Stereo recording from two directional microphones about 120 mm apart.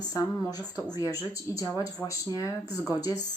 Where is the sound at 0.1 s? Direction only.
30° left (ahead or behind).